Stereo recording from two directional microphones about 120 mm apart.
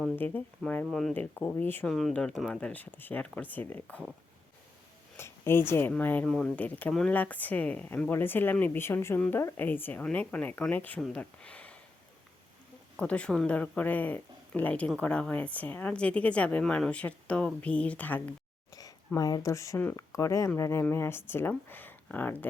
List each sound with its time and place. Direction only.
0.6 s speech: 15° left (ahead or behind)
0.9 s speech: centre (ahead or behind)
1.1 s speech: 15° left (ahead or behind)
1.9 s speech: centre (ahead or behind)
5.1 s a woman's voice: 20° left (ahead or behind)
13.0 s speech: 10° left (ahead or behind)
18.7 s speech: 30° left (ahead or behind); by 22.4 s 15° left (ahead or behind)